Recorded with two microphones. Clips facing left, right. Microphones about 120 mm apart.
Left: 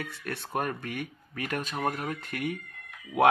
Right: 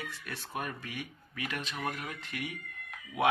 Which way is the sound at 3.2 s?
60° left (ahead or behind).